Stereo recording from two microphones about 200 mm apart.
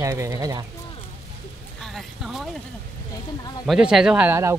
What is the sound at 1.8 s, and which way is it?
Speech, centre (ahead or behind).